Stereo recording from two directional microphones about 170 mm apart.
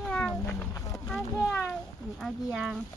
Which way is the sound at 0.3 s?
20° left (ahead or behind).